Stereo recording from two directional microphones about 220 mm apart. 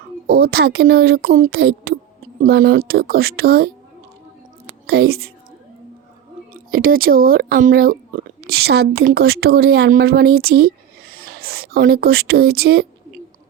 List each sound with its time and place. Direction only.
0.3 s speech: 45° right (ahead or behind)
4.9 s speech: 45° right (ahead or behind)
6.5 s speech: 40° right (ahead or behind)